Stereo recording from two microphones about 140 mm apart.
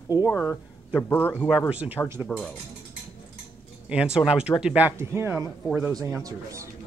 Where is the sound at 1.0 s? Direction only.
15° left (ahead or behind).